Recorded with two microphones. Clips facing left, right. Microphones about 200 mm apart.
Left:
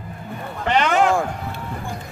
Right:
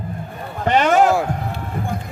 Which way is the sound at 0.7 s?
45° right (ahead or behind).